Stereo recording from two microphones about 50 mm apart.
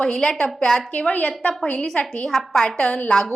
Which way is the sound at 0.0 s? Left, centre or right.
Centre.